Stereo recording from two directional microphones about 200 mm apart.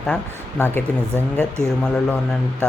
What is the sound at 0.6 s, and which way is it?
Speech, 10° left (ahead or behind).